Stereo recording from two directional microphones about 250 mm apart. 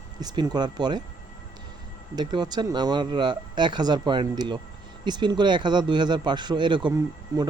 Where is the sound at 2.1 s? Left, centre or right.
Centre.